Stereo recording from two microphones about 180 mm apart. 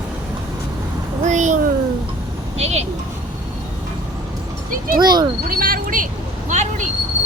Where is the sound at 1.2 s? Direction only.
40° right (ahead or behind).